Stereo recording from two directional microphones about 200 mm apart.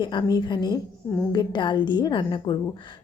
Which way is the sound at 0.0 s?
25° left (ahead or behind).